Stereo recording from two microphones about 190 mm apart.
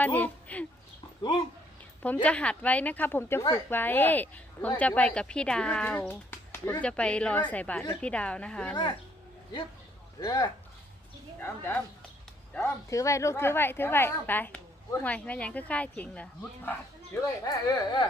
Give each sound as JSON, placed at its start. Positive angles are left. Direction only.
{"t": 0.0, "sound": "speech", "side_deg": 10}
{"t": 2.2, "sound": "a woman's voice", "side_deg": 5}
{"t": 10.2, "sound": "a woman's voice", "side_deg": 20}
{"t": 17.4, "sound": "speech", "side_deg": 20}